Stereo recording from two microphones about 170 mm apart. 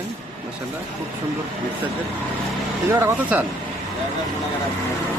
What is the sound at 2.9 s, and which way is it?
Speech, 10° right (ahead or behind).